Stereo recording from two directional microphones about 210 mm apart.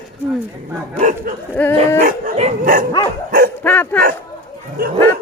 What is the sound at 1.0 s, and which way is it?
Speech, 35° right (ahead or behind).